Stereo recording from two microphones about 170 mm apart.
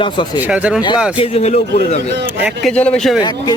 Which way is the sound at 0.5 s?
5° right (ahead or behind).